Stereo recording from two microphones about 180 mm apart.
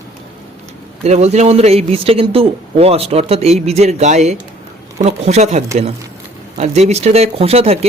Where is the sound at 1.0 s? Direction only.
40° right (ahead or behind).